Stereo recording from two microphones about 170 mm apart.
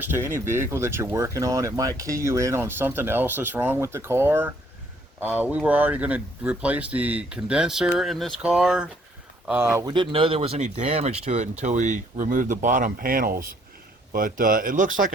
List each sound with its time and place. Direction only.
0.0 s speech: 15° right (ahead or behind)
9.9 s speech: 30° right (ahead or behind); by 15.1 s 50° right (ahead or behind)